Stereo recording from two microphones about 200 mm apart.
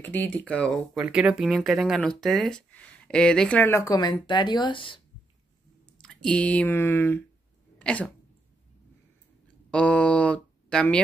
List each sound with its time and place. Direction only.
0.0 s speech: 10° left (ahead or behind); by 5.0 s 25° left (ahead or behind)
5.9 s speech: 5° left (ahead or behind)
9.7 s a sound: 5° left (ahead or behind)